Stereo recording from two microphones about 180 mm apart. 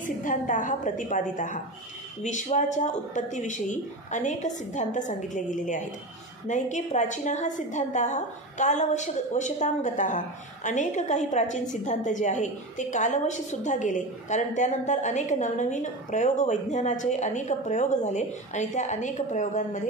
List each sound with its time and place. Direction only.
0.0 s a woman's voice: 45° left (ahead or behind)